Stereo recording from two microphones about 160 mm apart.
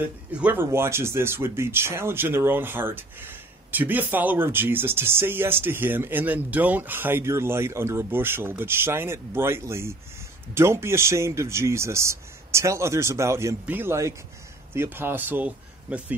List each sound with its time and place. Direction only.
0.0 s speech: 10° right (ahead or behind)